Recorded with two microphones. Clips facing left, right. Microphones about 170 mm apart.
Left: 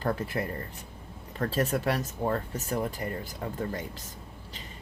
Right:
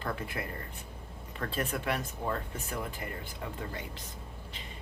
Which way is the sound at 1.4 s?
40° left (ahead or behind).